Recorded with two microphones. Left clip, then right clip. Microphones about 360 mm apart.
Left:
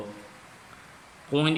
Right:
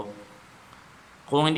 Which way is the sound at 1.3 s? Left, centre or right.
Centre.